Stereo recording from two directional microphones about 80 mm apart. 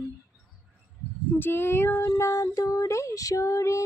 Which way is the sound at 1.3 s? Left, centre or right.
Left.